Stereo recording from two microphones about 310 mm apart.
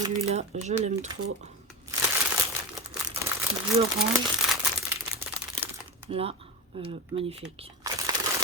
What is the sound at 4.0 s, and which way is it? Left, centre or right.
Speech, centre.